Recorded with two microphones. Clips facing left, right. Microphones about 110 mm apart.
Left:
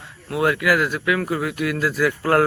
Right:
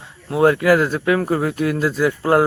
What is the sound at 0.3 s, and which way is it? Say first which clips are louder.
Speech: right 5 dB; 30° right (ahead or behind).